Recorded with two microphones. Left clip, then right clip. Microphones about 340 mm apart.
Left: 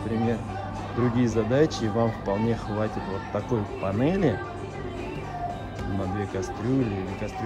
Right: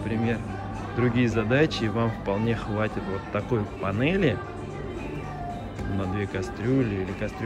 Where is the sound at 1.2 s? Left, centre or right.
Centre.